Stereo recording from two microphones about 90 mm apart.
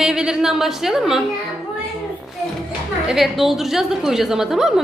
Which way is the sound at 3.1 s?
Centre (ahead or behind).